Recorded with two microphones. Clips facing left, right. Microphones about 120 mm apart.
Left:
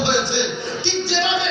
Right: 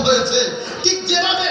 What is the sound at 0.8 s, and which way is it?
Music, 60° right (ahead or behind).